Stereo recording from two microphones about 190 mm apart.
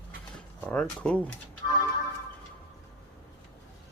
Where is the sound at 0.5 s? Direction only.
5° left (ahead or behind).